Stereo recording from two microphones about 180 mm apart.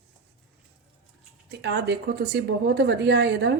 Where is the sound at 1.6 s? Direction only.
70° right (ahead or behind).